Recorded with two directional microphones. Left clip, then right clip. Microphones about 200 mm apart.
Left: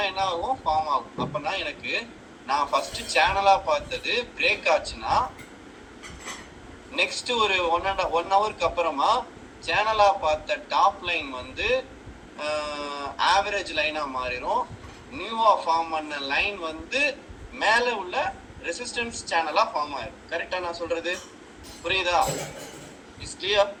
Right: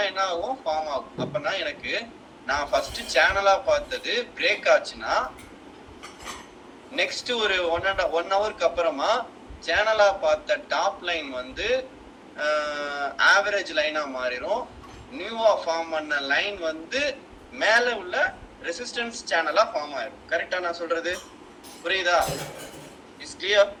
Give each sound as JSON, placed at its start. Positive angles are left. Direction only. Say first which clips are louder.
{"t": 0.0, "sound": "a man's voice", "louder": "even", "side_deg": -15}
{"t": 6.9, "sound": "a man's voice", "louder": "left 1 dB", "side_deg": -15}
{"t": 23.2, "sound": "speech", "louder": "right 2 dB", "side_deg": -15}